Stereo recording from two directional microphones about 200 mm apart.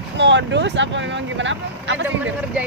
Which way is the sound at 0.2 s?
65° right (ahead or behind).